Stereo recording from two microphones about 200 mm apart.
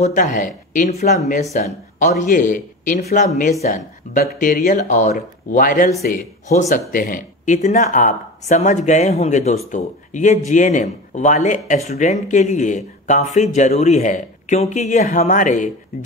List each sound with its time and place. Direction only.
0.0 s speech: 40° left (ahead or behind)